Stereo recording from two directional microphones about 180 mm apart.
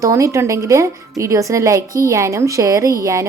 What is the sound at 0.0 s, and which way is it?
A woman's voice, 15° right (ahead or behind).